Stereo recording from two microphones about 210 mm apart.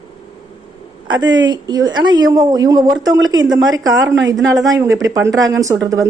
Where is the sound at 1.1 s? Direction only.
20° right (ahead or behind).